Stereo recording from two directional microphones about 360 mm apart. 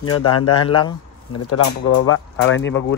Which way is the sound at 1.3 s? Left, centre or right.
Left.